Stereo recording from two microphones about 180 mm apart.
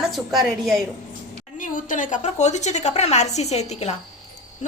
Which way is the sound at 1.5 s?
45° left (ahead or behind).